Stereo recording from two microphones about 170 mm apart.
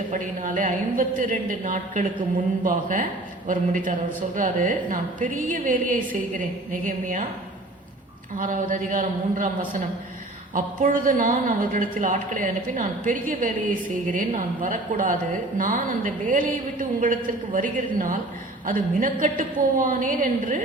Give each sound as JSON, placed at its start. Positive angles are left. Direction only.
{"t": 0.1, "sound": "a woman's voice", "side_deg": -50}
{"t": 8.4, "sound": "a woman's voice", "side_deg": -50}